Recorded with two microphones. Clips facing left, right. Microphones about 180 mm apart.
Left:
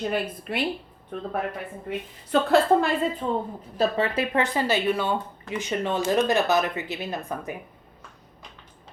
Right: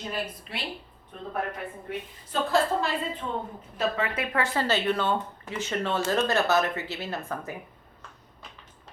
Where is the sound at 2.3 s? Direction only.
65° left (ahead or behind).